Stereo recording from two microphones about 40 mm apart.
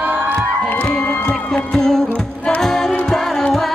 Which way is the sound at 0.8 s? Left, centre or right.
Left.